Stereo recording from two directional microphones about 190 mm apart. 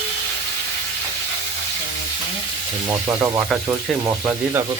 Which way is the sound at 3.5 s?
Centre (ahead or behind).